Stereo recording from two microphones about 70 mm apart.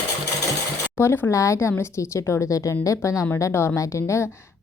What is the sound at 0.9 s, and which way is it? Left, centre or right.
Speech, left.